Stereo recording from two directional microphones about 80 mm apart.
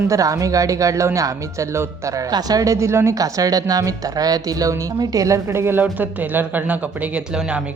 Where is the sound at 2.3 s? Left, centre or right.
Right; by 7.2 s centre.